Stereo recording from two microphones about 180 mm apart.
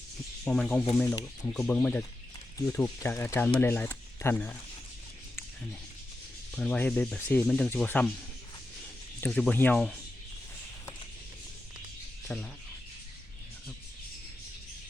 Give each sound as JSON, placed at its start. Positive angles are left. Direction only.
{"t": 0.4, "sound": "speech", "side_deg": 5}
{"t": 2.6, "sound": "speech", "side_deg": 15}
{"t": 6.5, "sound": "speech", "side_deg": 5}
{"t": 9.2, "sound": "speech", "side_deg": 10}
{"t": 12.3, "sound": "speech", "side_deg": 5}